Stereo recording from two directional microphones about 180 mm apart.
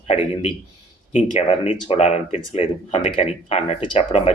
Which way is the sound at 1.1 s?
40° left (ahead or behind).